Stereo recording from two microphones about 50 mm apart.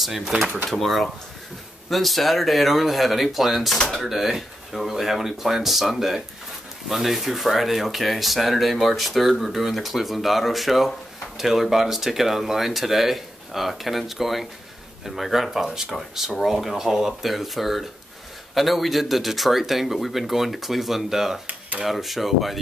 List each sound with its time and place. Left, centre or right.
0.0 s speech: centre
21.5 s speech: right
21.8 s speech: centre